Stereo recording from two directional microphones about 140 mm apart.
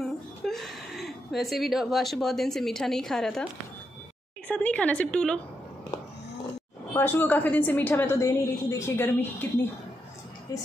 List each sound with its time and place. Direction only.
0.0 s a woman's voice: centre (ahead or behind)
4.5 s a woman's voice: 10° left (ahead or behind)
6.9 s a woman's voice: 15° left (ahead or behind)
10.5 s a woman's voice: 25° left (ahead or behind)